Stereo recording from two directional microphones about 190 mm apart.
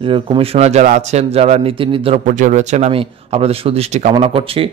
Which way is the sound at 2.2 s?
40° right (ahead or behind).